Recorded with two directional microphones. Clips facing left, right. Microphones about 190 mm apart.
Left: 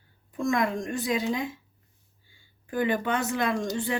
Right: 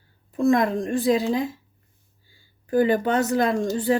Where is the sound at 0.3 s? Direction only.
35° right (ahead or behind).